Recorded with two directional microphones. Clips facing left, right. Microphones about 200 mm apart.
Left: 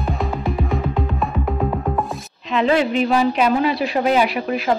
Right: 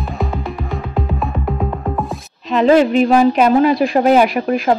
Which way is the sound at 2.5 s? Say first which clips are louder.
Right 6 dB; 40° right (ahead or behind).